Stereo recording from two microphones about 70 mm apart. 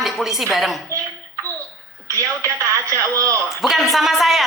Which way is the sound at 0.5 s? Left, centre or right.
Centre.